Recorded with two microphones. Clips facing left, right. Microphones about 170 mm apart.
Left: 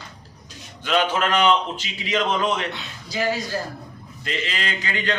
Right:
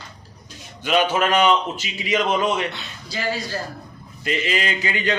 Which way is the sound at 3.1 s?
15° left (ahead or behind).